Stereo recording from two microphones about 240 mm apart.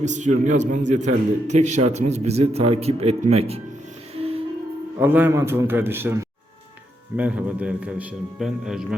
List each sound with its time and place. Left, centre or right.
0.0 s a man's voice: right
4.1 s music: right
4.9 s a man's voice: centre